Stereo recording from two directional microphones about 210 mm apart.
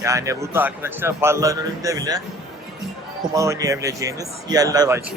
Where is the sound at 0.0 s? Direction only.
15° right (ahead or behind).